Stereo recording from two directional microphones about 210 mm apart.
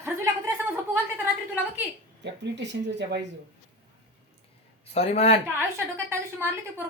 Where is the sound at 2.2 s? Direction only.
55° right (ahead or behind).